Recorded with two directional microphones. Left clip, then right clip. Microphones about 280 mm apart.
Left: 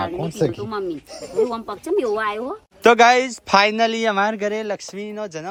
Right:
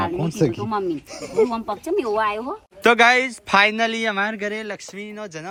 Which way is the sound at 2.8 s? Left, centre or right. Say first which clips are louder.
Left 2 dB; centre.